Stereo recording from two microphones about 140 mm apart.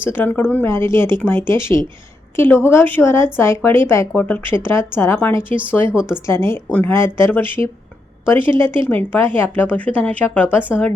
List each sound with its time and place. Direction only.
0.0 s speech: 15° left (ahead or behind)
5.9 s a woman's voice: 5° right (ahead or behind)
6.2 s speech: 20° left (ahead or behind)